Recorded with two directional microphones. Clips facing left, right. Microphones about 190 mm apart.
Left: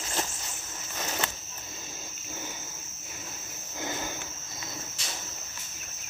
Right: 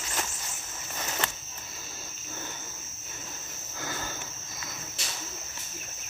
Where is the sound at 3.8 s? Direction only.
20° left (ahead or behind).